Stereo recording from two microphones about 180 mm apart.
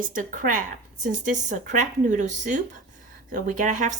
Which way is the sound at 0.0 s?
50° right (ahead or behind).